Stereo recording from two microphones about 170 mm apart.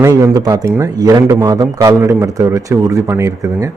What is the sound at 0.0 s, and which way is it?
A man's voice, 20° right (ahead or behind).